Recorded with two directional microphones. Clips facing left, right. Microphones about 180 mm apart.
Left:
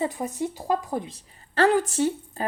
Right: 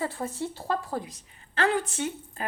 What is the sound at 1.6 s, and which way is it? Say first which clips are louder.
Speech: left 6 dB; 40° left (ahead or behind).